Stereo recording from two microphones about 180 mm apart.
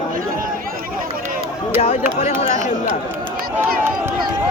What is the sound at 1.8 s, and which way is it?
Speech, 40° left (ahead or behind).